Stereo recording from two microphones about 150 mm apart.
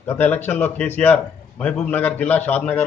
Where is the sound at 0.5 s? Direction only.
15° left (ahead or behind).